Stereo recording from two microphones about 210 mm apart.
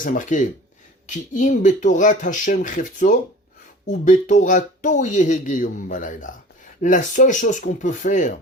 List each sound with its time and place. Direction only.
0.0 s speech: 40° left (ahead or behind)